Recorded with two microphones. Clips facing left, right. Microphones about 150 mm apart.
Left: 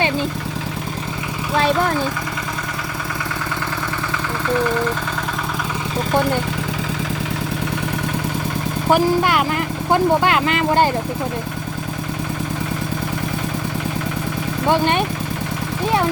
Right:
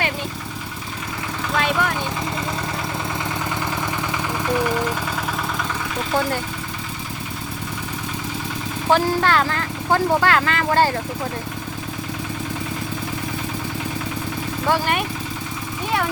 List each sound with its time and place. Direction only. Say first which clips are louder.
1.5 s speech: left 4 dB; 35° left (ahead or behind)
8.9 s speech: left 2 dB; 15° left (ahead or behind)
14.7 s speech: left 4 dB; 25° left (ahead or behind)